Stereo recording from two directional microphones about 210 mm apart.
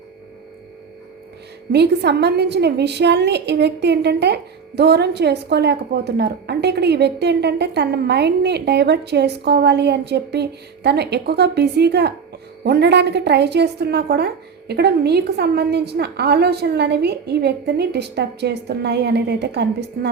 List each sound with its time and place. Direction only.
1.7 s a woman's voice: 50° right (ahead or behind)